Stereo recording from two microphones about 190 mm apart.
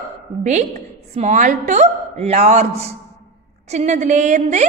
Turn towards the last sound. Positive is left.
turn(degrees=-40)  # may be behind; listen again after turning